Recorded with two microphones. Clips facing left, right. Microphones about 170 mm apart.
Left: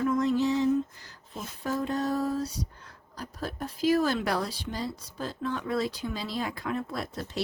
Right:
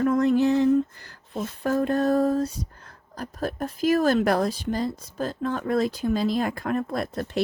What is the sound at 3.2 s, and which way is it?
Speech, 50° right (ahead or behind).